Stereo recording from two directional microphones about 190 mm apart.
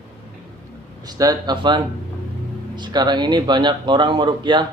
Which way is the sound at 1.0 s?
20° right (ahead or behind).